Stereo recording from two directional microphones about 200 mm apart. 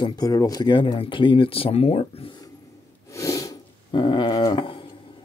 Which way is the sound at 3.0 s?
15° left (ahead or behind).